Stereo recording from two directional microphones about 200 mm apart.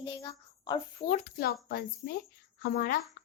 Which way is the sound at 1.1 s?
50° left (ahead or behind).